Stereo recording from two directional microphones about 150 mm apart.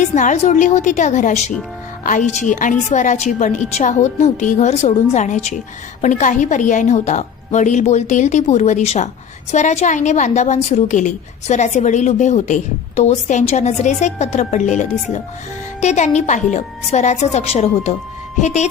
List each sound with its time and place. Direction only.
0.0 s a woman's voice: 55° left (ahead or behind)